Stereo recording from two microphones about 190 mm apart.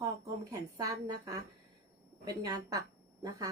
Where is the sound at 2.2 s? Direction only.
20° right (ahead or behind).